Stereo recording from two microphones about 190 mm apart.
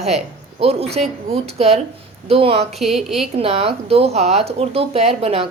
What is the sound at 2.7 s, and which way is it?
Speech, centre (ahead or behind).